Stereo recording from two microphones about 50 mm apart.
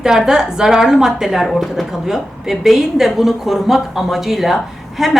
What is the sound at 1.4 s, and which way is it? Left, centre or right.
A woman's voice, centre.